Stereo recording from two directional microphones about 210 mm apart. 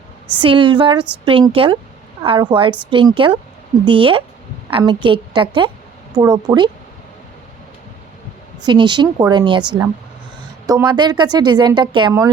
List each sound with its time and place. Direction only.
0.4 s speech: 25° right (ahead or behind)
8.6 s speech: 20° right (ahead or behind)
10.7 s speech: 20° right (ahead or behind)